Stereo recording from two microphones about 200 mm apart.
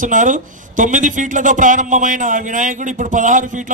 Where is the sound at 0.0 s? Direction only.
40° right (ahead or behind).